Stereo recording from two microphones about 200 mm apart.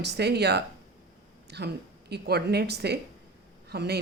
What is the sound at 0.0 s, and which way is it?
Speech, 55° right (ahead or behind).